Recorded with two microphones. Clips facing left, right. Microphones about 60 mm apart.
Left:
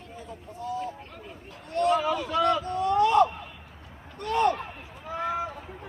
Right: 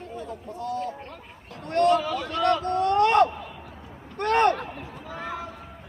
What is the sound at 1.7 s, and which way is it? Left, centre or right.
Speech, right.